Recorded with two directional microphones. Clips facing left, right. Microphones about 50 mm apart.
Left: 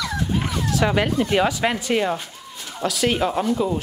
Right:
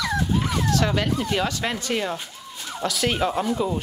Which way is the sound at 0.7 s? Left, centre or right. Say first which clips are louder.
Left 4 dB; centre.